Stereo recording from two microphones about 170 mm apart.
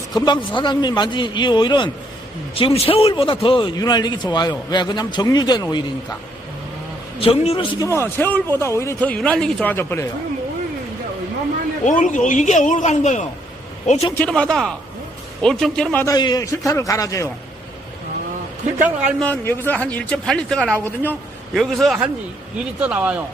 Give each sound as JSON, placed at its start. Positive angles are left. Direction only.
{"t": 0.1, "sound": "a man's voice", "side_deg": 25}
{"t": 7.2, "sound": "a man's voice", "side_deg": 35}
{"t": 7.8, "sound": "a man's voice", "side_deg": 15}
{"t": 11.9, "sound": "speech", "side_deg": 50}
{"t": 14.2, "sound": "a man's voice", "side_deg": 5}
{"t": 16.1, "sound": "a man's voice", "side_deg": 25}
{"t": 18.8, "sound": "speech", "side_deg": -10}
{"t": 19.2, "sound": "a man's voice", "side_deg": 10}
{"t": 21.5, "sound": "a man's voice", "side_deg": 0}